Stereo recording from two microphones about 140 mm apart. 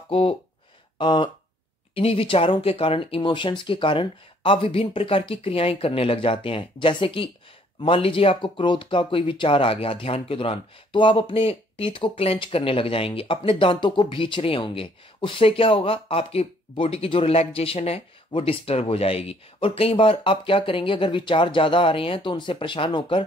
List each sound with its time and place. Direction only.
0.1 s speech: 40° left (ahead or behind)